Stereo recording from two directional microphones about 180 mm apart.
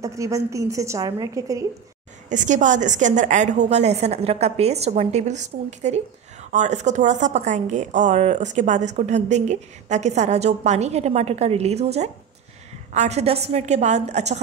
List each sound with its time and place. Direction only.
0.0 s a woman's voice: 15° right (ahead or behind)
2.2 s a woman's voice: 45° right (ahead or behind)